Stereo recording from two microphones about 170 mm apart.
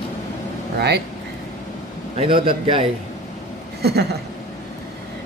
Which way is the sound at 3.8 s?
70° right (ahead or behind).